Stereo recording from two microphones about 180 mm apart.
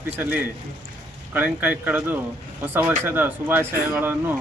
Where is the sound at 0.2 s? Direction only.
10° right (ahead or behind).